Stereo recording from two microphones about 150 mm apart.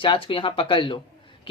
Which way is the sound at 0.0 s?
35° left (ahead or behind).